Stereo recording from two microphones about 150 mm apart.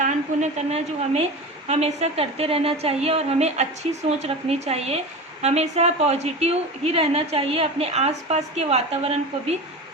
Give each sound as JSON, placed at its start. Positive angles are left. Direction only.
{"t": 0.0, "sound": "a woman's voice", "side_deg": -50}